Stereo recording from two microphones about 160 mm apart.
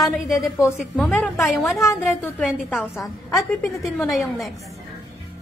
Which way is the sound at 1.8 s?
20° left (ahead or behind).